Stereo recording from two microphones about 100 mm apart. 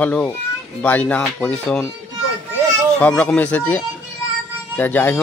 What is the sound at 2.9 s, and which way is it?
A man's voice, 10° left (ahead or behind).